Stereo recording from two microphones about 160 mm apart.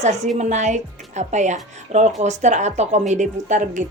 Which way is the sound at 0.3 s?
50° right (ahead or behind).